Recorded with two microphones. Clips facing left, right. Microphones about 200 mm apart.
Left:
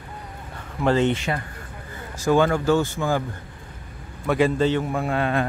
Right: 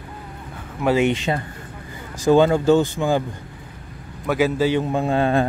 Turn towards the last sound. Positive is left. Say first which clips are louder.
# right 4 dB
turn(degrees=-30)  # may be behind; listen again after turning